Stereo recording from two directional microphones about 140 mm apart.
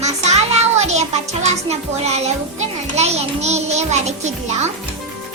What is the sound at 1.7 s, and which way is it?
A child's voice, 50° right (ahead or behind).